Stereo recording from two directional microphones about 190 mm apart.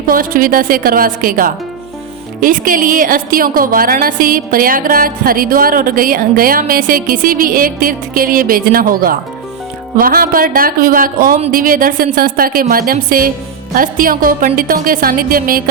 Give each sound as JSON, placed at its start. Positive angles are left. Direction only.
{"t": 0.1, "sound": "a woman's voice", "side_deg": -50}